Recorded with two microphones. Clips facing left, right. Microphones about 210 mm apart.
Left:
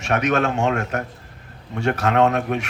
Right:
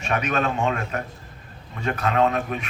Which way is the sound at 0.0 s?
80° left.